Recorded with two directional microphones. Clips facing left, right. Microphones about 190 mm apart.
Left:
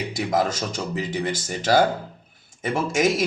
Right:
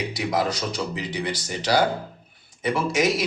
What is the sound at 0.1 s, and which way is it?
Speech, 50° left (ahead or behind).